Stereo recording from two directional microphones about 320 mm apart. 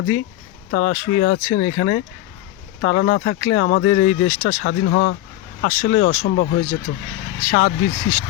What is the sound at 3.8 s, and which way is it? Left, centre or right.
Speech, left.